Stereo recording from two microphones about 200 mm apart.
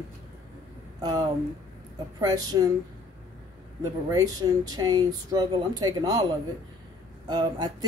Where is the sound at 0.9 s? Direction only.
20° right (ahead or behind).